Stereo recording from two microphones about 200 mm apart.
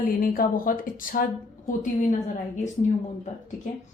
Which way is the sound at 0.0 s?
45° left (ahead or behind).